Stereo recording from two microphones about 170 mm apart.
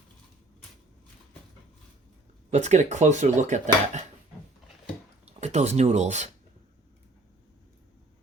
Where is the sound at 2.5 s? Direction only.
45° right (ahead or behind).